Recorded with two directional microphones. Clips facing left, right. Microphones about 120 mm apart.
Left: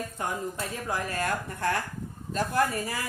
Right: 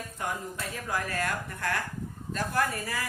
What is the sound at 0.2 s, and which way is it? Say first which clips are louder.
Speech: left 1 dB; 30° left (ahead or behind).